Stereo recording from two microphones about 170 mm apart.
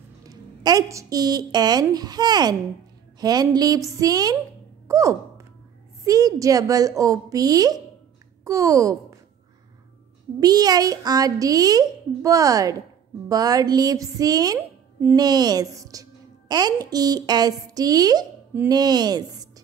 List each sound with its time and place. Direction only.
0.3 s a child's voice: 20° right (ahead or behind)
4.8 s sigh: 20° right (ahead or behind)
6.0 s a child's voice: 20° right (ahead or behind)
10.4 s a child's voice: 20° right (ahead or behind)